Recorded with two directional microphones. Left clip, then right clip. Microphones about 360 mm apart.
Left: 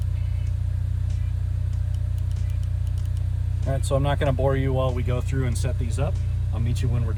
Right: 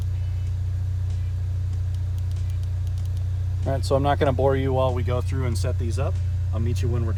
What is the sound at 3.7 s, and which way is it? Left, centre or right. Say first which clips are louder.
Speech: right 3 dB; right.